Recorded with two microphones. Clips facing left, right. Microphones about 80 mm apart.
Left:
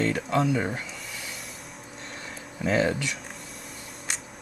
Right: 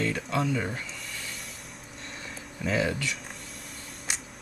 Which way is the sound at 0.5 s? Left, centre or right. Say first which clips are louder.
Left 3 dB; centre.